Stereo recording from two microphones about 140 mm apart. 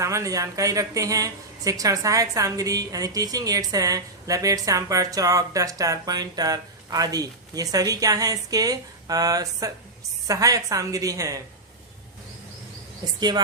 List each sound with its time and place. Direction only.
0.0 s speech: 20° right (ahead or behind)
13.1 s a woman's voice: 30° right (ahead or behind)